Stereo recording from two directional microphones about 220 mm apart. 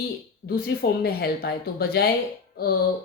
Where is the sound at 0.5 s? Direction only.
45° left (ahead or behind).